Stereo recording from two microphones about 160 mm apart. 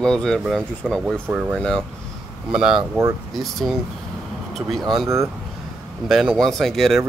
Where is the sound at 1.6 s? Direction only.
5° left (ahead or behind).